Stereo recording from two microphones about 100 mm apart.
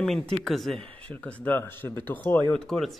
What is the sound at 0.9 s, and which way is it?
Speech, 15° left (ahead or behind).